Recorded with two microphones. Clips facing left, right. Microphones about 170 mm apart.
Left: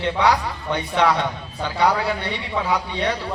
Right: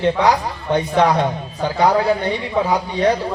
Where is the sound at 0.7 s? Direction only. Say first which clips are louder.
Right 4 dB; 40° right (ahead or behind).